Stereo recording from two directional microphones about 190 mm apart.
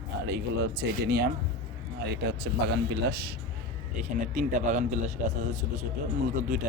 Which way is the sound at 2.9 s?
60° right (ahead or behind).